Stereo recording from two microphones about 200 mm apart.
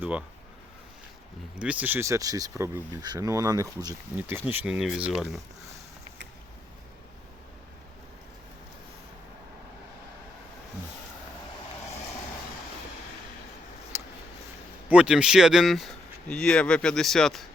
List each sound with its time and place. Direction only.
0.0 s speech: 5° right (ahead or behind)
1.5 s speech: 5° right (ahead or behind)
13.9 s a sound: 10° right (ahead or behind)
14.8 s speech: 5° right (ahead or behind)